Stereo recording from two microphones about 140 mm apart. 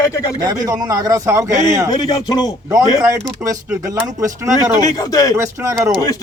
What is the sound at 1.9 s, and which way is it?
Speech, 30° left (ahead or behind).